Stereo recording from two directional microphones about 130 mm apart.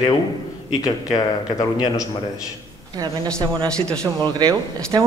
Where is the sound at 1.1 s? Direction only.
35° left (ahead or behind).